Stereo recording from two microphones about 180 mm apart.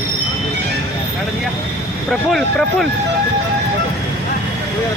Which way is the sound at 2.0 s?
Centre (ahead or behind).